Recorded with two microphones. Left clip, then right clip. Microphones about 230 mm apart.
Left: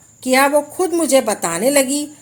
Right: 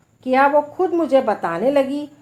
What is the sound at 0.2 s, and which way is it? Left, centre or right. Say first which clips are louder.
A woman's voice: left 1 dB; left.